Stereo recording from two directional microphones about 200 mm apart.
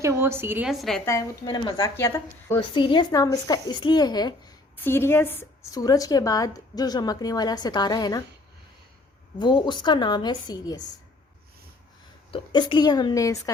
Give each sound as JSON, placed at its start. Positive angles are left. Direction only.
{"t": 0.0, "sound": "a woman's voice", "side_deg": -15}
{"t": 1.0, "sound": "speech", "side_deg": 15}
{"t": 2.6, "sound": "a woman's voice", "side_deg": 25}
{"t": 9.4, "sound": "a woman's voice", "side_deg": 25}
{"t": 12.3, "sound": "a woman's voice", "side_deg": 25}